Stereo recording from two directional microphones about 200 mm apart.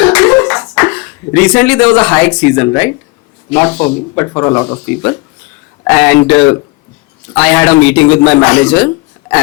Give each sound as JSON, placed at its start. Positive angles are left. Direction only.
{"t": 0.0, "sound": "a sound", "side_deg": 10}
{"t": 2.4, "sound": "speech", "side_deg": 15}
{"t": 5.8, "sound": "speech", "side_deg": 10}